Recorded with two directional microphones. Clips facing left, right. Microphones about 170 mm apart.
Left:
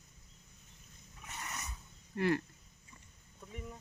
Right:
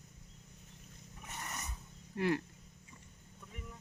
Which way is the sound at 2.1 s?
10° right (ahead or behind).